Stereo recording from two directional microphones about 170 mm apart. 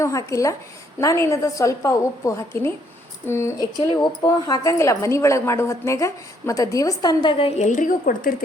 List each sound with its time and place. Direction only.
0.0 s a woman's voice: 20° left (ahead or behind); by 8.4 s 55° left (ahead or behind)